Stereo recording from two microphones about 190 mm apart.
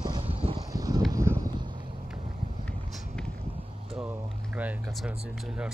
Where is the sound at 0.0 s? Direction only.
25° right (ahead or behind).